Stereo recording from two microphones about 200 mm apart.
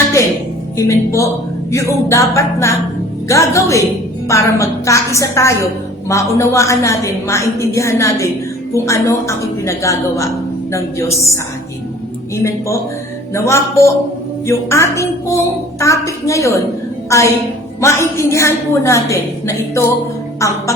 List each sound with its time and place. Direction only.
0.8 s a woman's voice: 15° left (ahead or behind)
12.4 s a woman's voice: 15° left (ahead or behind)